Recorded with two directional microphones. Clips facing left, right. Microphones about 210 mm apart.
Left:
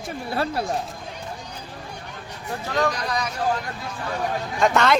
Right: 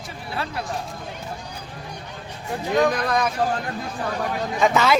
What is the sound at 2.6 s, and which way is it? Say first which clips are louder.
Speech: right 4 dB; 20° right (ahead or behind).